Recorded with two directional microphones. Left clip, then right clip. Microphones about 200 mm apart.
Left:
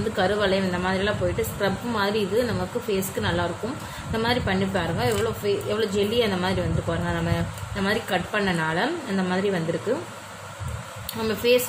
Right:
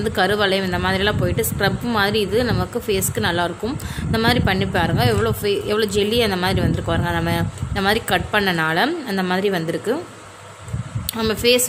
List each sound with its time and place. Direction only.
0.1 s a woman's voice: 55° right (ahead or behind)
11.1 s speech: 50° right (ahead or behind)